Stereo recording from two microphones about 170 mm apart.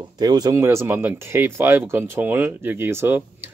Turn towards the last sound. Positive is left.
turn(degrees=-15)  # may be behind; listen again after turning